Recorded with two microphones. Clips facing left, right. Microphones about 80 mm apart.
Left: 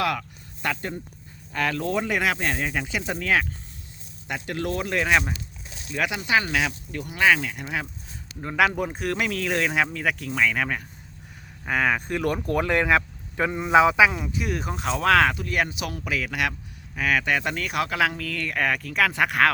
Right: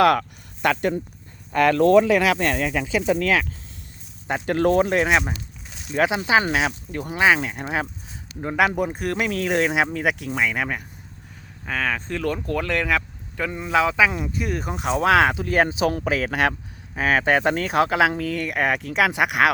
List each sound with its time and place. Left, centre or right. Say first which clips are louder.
0.0 s speech: right 9 dB; right
1.5 s speech: right 10 dB; right
4.3 s speech: right 9 dB; right
4.9 s speech: right 3 dB; right
7.2 s speech: right 2 dB; right
8.5 s speech: right 1 dB; centre
11.6 s speech: left 2 dB; centre
14.1 s speech: right 2 dB; centre